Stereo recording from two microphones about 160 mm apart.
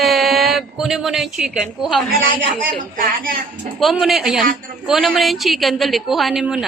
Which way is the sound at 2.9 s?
60° right (ahead or behind).